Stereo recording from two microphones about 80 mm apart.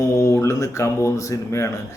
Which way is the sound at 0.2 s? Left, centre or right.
Left.